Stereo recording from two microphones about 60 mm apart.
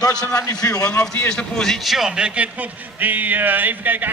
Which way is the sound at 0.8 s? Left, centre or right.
Centre.